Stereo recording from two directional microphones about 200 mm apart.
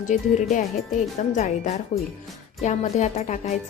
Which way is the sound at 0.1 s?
40° left (ahead or behind).